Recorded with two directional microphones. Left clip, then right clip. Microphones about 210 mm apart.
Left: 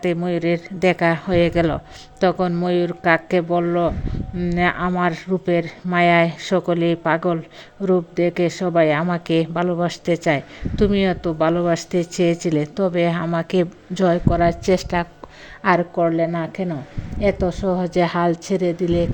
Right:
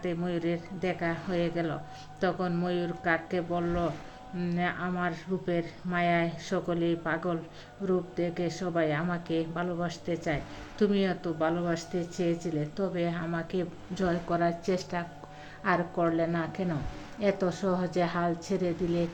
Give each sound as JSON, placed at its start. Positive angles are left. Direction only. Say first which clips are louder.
{"t": 0.0, "sound": "a woman's voice", "louder": "left 11 dB", "side_deg": 45}